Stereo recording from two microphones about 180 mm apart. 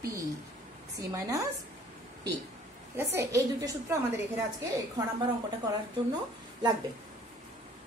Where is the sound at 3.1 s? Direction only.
15° right (ahead or behind).